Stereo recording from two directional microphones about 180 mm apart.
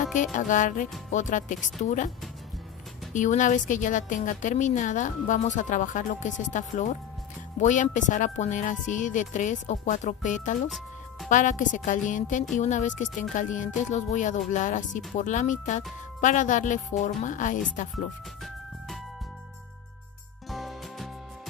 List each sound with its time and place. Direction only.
0.1 s a woman's voice: 45° left (ahead or behind)
3.1 s a woman's voice: 45° left (ahead or behind)
20.4 s music: centre (ahead or behind)